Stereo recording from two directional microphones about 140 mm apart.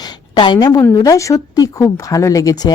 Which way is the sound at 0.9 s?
25° left (ahead or behind).